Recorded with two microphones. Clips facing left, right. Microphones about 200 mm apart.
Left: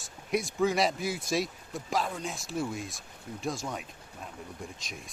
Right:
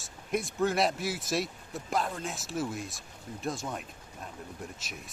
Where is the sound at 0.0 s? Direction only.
Centre (ahead or behind).